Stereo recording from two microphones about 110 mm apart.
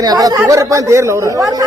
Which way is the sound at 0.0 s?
35° right (ahead or behind).